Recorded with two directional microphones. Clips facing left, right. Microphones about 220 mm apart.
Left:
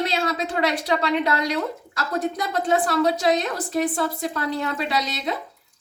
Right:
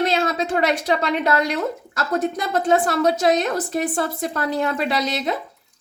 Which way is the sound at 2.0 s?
45° right (ahead or behind).